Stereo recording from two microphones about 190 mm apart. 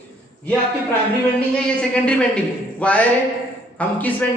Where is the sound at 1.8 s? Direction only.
5° left (ahead or behind).